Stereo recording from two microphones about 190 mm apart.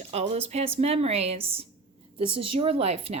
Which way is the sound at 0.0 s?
35° right (ahead or behind).